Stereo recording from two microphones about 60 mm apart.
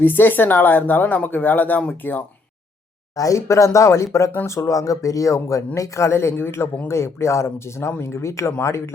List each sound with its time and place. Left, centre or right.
0.0 s speech: left
3.2 s speech: left